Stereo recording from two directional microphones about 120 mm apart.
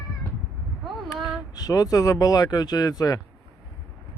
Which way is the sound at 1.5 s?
30° left (ahead or behind).